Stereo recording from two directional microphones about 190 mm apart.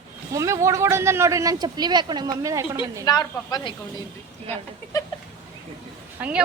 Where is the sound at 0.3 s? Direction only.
15° right (ahead or behind).